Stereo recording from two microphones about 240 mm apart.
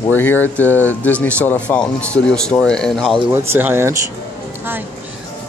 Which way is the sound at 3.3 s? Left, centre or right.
Centre.